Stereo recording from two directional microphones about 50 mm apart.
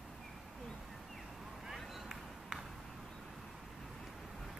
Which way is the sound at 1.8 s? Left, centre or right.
Centre.